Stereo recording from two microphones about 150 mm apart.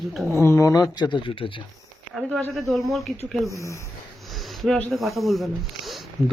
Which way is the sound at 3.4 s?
20° left (ahead or behind).